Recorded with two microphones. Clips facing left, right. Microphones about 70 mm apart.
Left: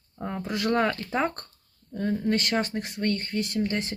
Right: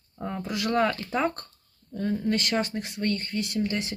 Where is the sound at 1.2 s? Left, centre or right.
Left.